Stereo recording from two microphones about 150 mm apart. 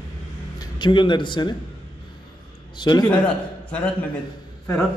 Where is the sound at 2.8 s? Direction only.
30° left (ahead or behind).